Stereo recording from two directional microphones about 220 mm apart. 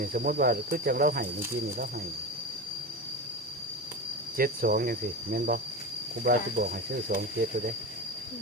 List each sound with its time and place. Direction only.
0.0 s speech: 40° right (ahead or behind)
4.4 s speech: 40° right (ahead or behind)